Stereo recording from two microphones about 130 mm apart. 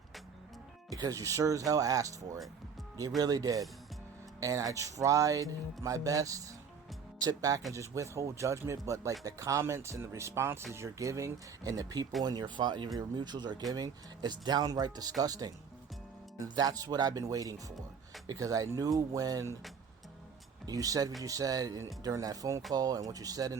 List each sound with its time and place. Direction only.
0.9 s music: 30° right (ahead or behind)
12.2 s speech: 35° right (ahead or behind)
15.2 s music: 30° right (ahead or behind)
16.6 s music: 30° right (ahead or behind)
20.7 s music: 25° right (ahead or behind)